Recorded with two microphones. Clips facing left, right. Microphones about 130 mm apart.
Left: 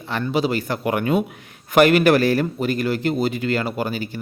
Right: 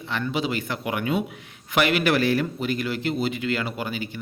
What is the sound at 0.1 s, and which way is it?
Speech, 40° left (ahead or behind).